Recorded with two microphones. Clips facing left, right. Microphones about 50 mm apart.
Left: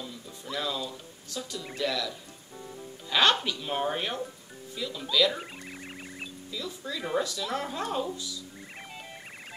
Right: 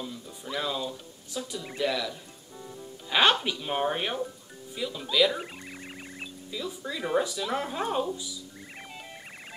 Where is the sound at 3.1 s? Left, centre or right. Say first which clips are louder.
Right 1 dB; centre.